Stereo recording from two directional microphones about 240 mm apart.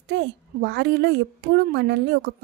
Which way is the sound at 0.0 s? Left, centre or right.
Right.